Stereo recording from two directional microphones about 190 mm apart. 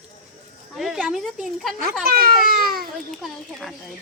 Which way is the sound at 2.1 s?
50° right (ahead or behind).